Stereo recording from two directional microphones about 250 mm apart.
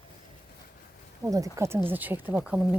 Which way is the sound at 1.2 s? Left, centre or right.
Centre.